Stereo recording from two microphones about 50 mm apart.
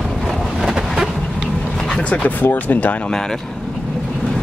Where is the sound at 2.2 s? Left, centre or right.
Left.